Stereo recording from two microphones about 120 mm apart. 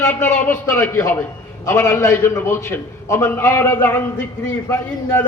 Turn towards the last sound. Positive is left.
turn(degrees=20)  # may be behind; listen again after turning